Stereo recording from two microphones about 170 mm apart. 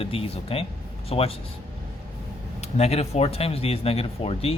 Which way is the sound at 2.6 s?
40° left (ahead or behind).